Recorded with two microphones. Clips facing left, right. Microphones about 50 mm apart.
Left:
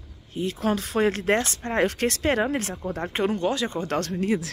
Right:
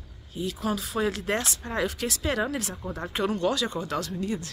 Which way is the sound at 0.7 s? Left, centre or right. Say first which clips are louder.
Left 5 dB; left.